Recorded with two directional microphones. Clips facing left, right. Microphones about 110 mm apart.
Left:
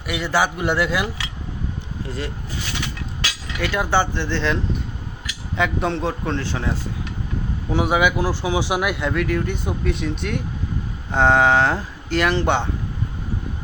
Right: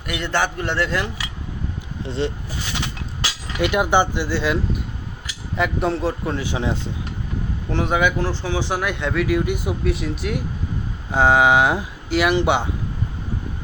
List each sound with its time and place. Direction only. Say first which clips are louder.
0.1 s a man's voice: left 2 dB; 5° left (ahead or behind)
2.0 s speech: right 6 dB; 25° right (ahead or behind)
3.6 s speech: right 3 dB; 20° right (ahead or behind)
7.7 s speech: left 1 dB; 5° left (ahead or behind); by 12.6 s 10° right (ahead or behind)